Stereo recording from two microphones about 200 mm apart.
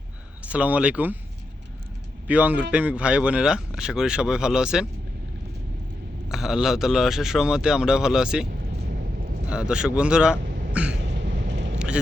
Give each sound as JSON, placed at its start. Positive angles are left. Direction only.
{"t": 0.4, "sound": "speech", "side_deg": -5}
{"t": 2.2, "sound": "a man's voice", "side_deg": -5}
{"t": 6.2, "sound": "a man's voice", "side_deg": 0}
{"t": 9.5, "sound": "speech", "side_deg": -5}
{"t": 10.9, "sound": "a sound", "side_deg": -60}